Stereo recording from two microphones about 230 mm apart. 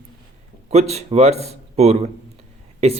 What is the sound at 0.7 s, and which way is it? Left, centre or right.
Speech, right.